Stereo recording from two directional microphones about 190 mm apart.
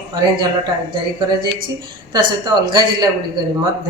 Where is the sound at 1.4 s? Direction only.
25° right (ahead or behind).